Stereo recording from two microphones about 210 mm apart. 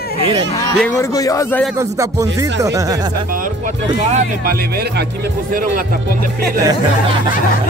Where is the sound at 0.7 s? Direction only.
10° left (ahead or behind).